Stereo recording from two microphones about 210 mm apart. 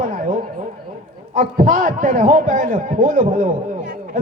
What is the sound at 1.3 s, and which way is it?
A man's voice, 35° right (ahead or behind).